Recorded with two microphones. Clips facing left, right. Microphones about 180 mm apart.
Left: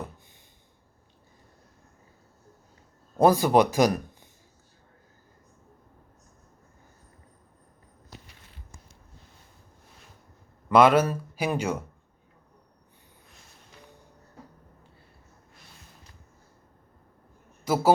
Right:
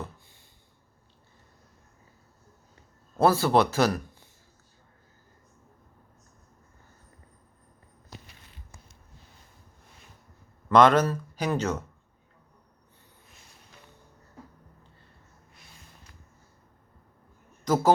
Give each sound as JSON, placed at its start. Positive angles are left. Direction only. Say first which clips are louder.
{"t": 3.2, "sound": "a man's voice", "louder": "left 2 dB", "side_deg": 15}
{"t": 10.7, "sound": "speech", "louder": "even", "side_deg": 10}
{"t": 17.7, "sound": "a man's voice", "louder": "right 1 dB", "side_deg": 10}